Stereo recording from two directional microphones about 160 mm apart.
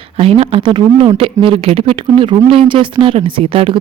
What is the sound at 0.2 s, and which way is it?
Speech, 35° right (ahead or behind).